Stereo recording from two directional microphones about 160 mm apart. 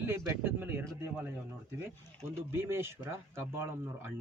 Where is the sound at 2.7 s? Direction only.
15° right (ahead or behind).